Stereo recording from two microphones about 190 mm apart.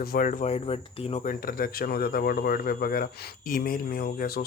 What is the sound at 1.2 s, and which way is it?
Speech, 50° left (ahead or behind).